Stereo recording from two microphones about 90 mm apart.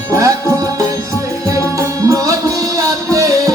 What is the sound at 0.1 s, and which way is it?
Music, 40° right (ahead or behind).